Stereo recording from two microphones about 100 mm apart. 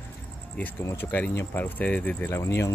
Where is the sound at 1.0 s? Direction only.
20° left (ahead or behind).